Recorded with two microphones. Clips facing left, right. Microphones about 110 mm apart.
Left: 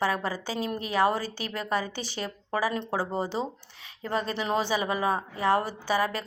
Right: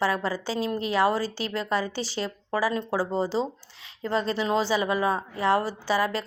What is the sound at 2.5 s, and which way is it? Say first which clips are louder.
Speech: right 2 dB; 20° left (ahead or behind).